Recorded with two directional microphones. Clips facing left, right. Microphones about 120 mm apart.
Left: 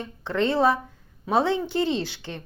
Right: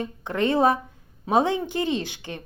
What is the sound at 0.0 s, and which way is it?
A woman's voice, 15° right (ahead or behind).